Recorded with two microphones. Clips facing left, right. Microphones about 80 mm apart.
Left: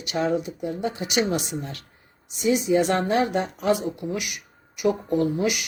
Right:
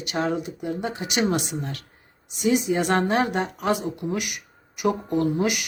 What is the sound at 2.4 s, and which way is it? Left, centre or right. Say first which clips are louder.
Speech: left 1 dB; right.